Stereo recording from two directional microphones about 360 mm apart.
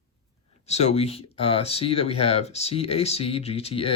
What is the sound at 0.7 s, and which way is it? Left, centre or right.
Speech, centre.